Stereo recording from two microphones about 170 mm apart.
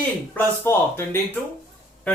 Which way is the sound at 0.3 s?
15° left (ahead or behind).